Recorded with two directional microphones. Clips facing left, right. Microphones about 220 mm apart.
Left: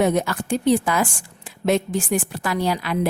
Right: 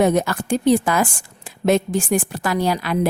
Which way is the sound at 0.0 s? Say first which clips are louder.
Right 2 dB; 45° right (ahead or behind).